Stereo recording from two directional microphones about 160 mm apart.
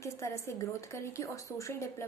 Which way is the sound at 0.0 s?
20° left (ahead or behind).